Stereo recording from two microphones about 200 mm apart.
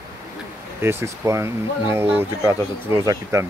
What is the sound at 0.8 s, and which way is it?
Speech, 10° right (ahead or behind).